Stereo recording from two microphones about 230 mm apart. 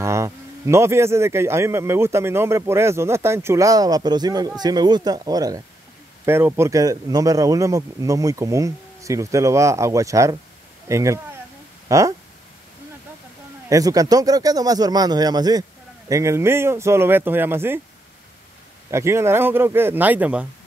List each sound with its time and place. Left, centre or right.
0.0 s speech: centre
13.7 s speech: centre
18.9 s speech: centre